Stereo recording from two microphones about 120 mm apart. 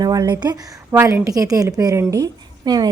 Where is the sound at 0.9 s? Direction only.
20° right (ahead or behind).